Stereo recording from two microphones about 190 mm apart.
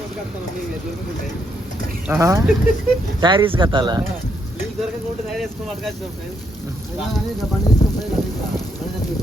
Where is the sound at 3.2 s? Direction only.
25° right (ahead or behind).